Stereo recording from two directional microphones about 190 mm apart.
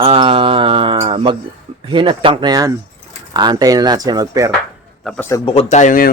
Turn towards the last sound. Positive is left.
turn(degrees=45)  # may be behind; listen again after turning